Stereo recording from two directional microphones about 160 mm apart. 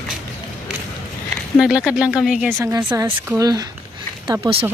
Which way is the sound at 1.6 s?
5° right (ahead or behind).